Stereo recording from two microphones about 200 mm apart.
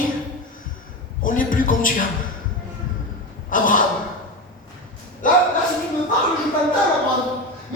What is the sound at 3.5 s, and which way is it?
Gasp, 40° left (ahead or behind).